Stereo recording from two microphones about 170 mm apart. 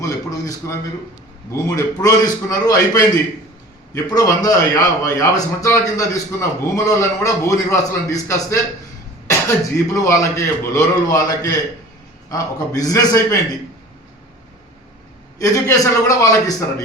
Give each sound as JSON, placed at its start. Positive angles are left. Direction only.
{"t": 0.0, "sound": "a sound", "side_deg": 20}
{"t": 1.5, "sound": "a man's voice", "side_deg": 20}
{"t": 9.9, "sound": "a man's voice", "side_deg": 20}
{"t": 15.4, "sound": "a man's voice", "side_deg": 20}